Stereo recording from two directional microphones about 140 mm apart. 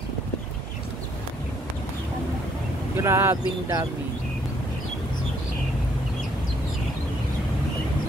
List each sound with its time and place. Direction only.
3.0 s speech: 20° right (ahead or behind)